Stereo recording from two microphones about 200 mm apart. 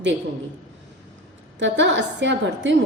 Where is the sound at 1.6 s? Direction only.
65° right (ahead or behind).